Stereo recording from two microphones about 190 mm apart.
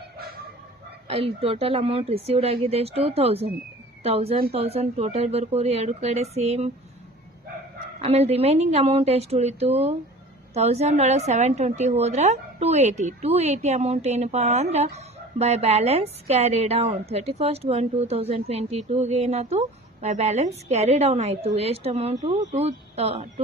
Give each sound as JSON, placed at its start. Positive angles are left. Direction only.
{"t": 1.0, "sound": "a woman's voice", "side_deg": -30}
{"t": 7.9, "sound": "a woman's voice", "side_deg": -35}
{"t": 22.1, "sound": "a woman's voice", "side_deg": -20}